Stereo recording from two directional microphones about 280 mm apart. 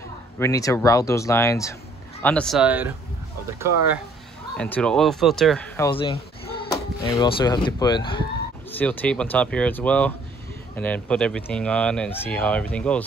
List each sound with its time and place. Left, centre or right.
0.4 s speech: centre
4.6 s speech: centre
5.9 s speech: centre
8.7 s speech: centre